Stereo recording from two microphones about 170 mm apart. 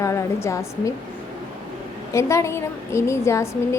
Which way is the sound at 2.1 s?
15° left (ahead or behind).